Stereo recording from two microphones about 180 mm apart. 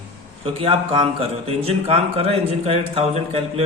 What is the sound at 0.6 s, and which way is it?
A man's voice, 30° right (ahead or behind).